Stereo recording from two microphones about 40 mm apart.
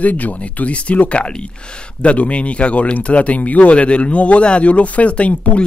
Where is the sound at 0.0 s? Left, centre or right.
Left.